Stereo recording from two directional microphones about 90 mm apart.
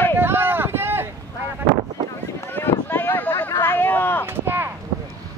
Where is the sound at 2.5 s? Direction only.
25° left (ahead or behind).